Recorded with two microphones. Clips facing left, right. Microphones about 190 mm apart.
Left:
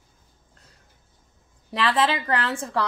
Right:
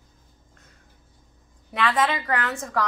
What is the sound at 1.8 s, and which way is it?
A woman's voice, 30° left (ahead or behind).